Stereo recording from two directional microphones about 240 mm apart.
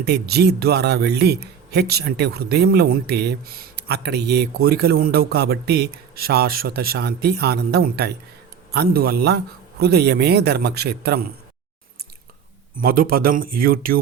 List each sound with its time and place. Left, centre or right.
0.0 s speech: right
12.7 s speech: right